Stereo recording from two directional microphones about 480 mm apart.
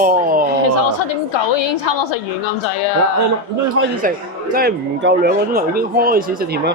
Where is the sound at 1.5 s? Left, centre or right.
Left.